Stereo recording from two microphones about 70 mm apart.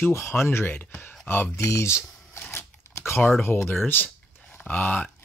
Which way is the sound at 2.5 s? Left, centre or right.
Left.